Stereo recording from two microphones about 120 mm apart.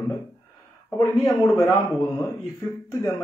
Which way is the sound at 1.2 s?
25° left (ahead or behind).